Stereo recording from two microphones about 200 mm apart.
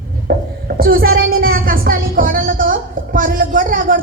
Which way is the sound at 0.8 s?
50° right (ahead or behind).